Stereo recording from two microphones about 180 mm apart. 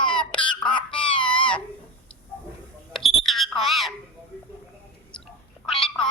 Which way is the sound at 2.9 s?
Centre (ahead or behind).